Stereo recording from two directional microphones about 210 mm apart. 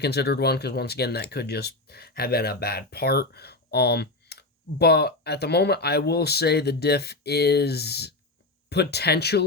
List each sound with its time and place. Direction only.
0.0 s speech: 50° left (ahead or behind)